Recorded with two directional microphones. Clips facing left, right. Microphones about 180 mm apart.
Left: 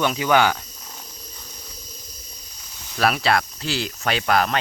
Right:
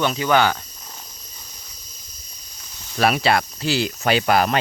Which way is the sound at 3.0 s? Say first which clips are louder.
Right 2 dB; centre (ahead or behind).